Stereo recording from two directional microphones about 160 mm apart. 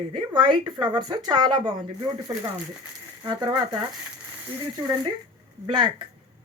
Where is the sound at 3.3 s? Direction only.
25° right (ahead or behind).